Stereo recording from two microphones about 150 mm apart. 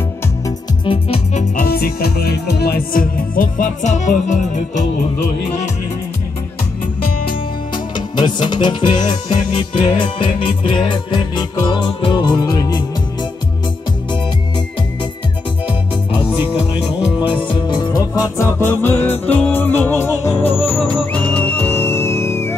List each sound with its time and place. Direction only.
0.8 s music: 40° left (ahead or behind)
1.6 s music: 90° left; by 4.5 s 55° left (ahead or behind)
7.7 s music: 30° left (ahead or behind)
16.1 s music: 30° left (ahead or behind); by 20.4 s 15° left (ahead or behind)
20.6 s music: 35° left (ahead or behind)
21.1 s music: 10° left (ahead or behind)